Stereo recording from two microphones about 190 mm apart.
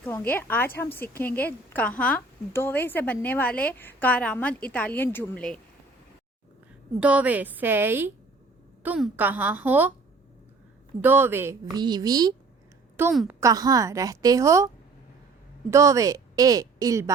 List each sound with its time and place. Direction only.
0.0 s a woman's voice: 10° left (ahead or behind)
7.0 s a woman's voice: 5° right (ahead or behind)
11.0 s a woman's voice: 10° right (ahead or behind)
15.7 s a woman's voice: 15° right (ahead or behind)